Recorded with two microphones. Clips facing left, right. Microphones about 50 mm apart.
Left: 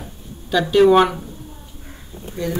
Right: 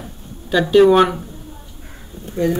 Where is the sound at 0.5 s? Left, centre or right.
Centre.